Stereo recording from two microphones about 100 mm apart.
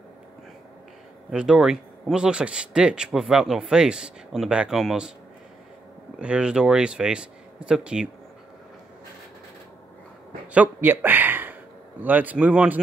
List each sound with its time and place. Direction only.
1.3 s speech: 5° right (ahead or behind)
6.1 s speech: 10° right (ahead or behind)
10.5 s speech: 15° right (ahead or behind)